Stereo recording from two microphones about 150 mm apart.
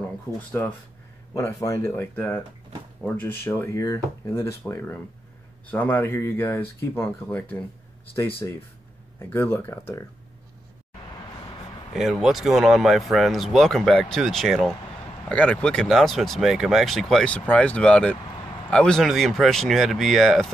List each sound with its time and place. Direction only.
1.3 s speech: 20° left (ahead or behind)
11.9 s speech: centre (ahead or behind)